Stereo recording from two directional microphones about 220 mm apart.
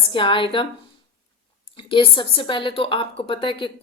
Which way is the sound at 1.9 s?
20° left (ahead or behind).